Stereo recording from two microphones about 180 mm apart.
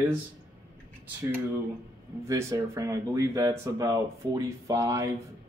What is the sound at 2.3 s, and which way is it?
Speech, 15° right (ahead or behind).